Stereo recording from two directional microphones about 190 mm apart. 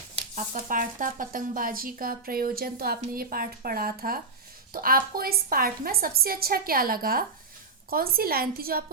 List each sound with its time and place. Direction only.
0.3 s speech: 45° right (ahead or behind)